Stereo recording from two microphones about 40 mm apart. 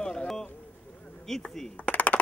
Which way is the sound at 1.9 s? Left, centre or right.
Left.